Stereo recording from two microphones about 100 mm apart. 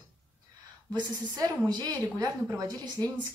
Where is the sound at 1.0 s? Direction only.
40° right (ahead or behind).